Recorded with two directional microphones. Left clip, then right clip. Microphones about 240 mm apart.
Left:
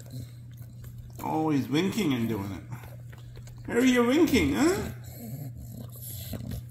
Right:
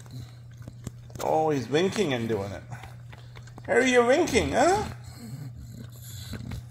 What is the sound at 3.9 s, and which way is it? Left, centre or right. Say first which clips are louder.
Speech: right 1 dB; right.